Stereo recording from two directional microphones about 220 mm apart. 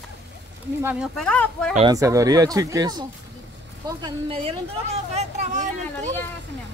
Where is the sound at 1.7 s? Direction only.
20° right (ahead or behind); by 6.1 s 35° right (ahead or behind).